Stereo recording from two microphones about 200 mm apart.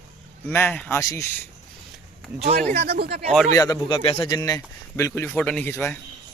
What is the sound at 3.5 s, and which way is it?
Speech, 20° left (ahead or behind).